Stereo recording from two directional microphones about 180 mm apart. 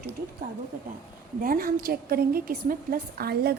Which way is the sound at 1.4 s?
50° right (ahead or behind).